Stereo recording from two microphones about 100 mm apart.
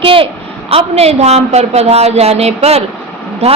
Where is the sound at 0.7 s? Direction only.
90° right.